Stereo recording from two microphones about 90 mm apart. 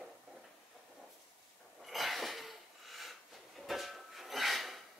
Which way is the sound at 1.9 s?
Centre (ahead or behind).